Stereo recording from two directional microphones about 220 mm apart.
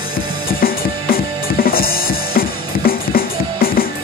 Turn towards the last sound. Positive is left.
turn(degrees=40)  # may be behind; listen again after turning